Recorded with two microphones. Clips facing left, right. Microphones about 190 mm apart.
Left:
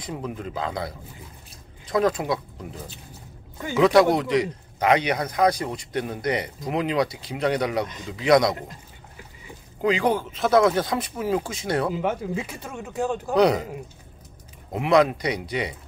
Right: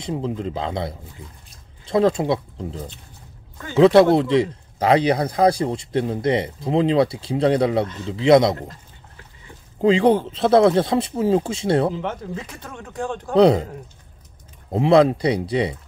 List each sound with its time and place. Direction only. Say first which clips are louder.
0.0 s speech: right 6 dB; 25° right (ahead or behind)
8.5 s a sound: right 3 dB; 15° left (ahead or behind)
9.8 s speech: right 6 dB; 30° right (ahead or behind)
11.9 s speech: left 2 dB; 10° left (ahead or behind)
13.3 s speech: right 5 dB; 30° right (ahead or behind)
14.7 s speech: right 4 dB; 30° right (ahead or behind)